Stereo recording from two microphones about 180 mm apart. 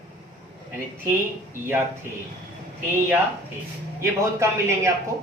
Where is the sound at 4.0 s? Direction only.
15° right (ahead or behind).